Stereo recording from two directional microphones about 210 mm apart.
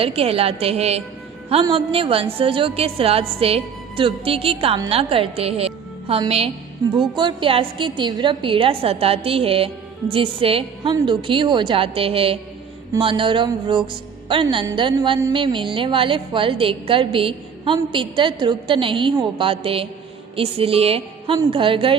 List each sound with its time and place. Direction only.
0.0 s a woman's voice: 30° right (ahead or behind)